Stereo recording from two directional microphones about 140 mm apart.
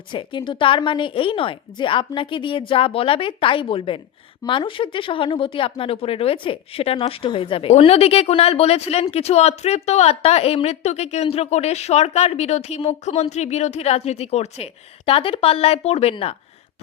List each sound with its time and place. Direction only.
0.1 s a woman's voice: 35° left (ahead or behind)